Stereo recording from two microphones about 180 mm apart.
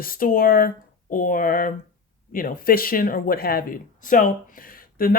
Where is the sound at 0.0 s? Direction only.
50° left (ahead or behind).